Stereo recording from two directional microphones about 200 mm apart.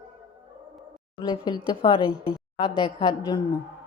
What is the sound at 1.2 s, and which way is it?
A woman's voice, 20° left (ahead or behind).